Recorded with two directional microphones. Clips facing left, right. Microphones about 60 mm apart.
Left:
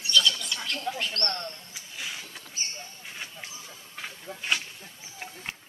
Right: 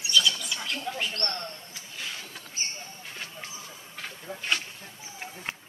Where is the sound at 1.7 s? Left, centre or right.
Centre.